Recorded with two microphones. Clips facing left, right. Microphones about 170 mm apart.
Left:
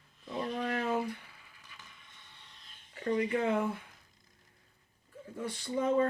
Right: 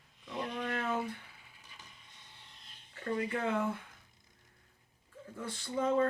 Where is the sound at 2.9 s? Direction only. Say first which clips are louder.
Left 4 dB; 20° left (ahead or behind).